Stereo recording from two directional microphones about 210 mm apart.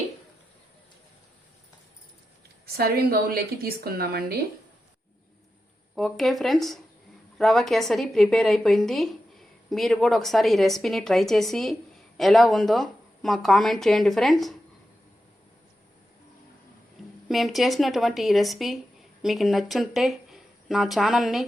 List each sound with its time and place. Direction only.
2.7 s speech: 45° right (ahead or behind)
6.0 s a woman's voice: centre (ahead or behind)
17.2 s a woman's voice: centre (ahead or behind)